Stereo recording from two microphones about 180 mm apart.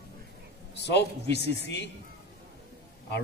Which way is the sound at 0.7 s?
70° left (ahead or behind).